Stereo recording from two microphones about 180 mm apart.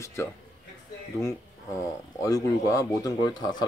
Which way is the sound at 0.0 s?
15° left (ahead or behind).